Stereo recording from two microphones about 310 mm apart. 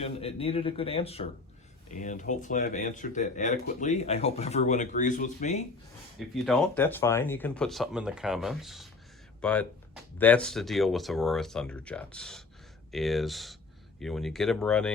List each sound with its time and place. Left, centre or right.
0.0 s speech: centre
6.1 s speech: centre